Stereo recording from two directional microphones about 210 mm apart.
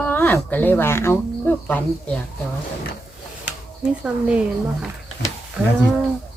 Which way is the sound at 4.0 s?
5° right (ahead or behind).